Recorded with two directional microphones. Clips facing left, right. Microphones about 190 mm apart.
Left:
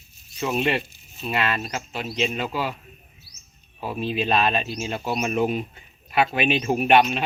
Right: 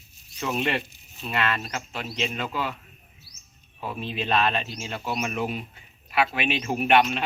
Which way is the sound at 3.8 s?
10° left (ahead or behind).